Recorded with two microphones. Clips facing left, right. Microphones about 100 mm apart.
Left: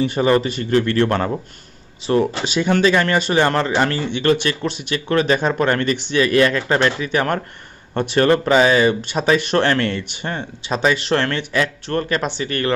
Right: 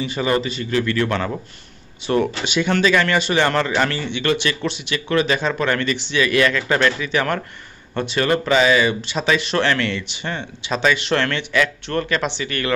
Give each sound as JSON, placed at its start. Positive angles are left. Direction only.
{"t": 0.0, "sound": "a man's voice", "side_deg": 55}
{"t": 1.0, "sound": "speech", "side_deg": 35}
{"t": 2.1, "sound": "speech", "side_deg": 20}
{"t": 2.4, "sound": "speech", "side_deg": 35}
{"t": 3.3, "sound": "speech", "side_deg": 25}
{"t": 4.1, "sound": "speech", "side_deg": 40}
{"t": 8.5, "sound": "speech", "side_deg": 40}